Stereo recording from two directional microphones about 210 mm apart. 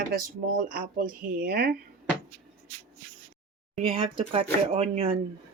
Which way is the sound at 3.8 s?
25° right (ahead or behind).